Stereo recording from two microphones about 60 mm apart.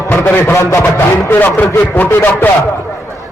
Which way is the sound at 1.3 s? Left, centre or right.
Left.